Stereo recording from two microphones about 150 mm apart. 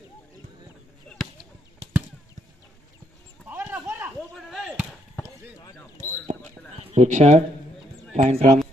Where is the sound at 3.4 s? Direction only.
10° right (ahead or behind).